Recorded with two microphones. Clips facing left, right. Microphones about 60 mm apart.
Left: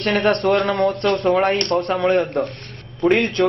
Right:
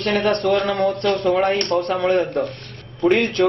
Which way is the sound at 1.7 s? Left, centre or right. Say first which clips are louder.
Even; left.